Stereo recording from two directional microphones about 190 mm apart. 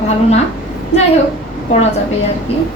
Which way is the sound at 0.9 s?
60° left (ahead or behind).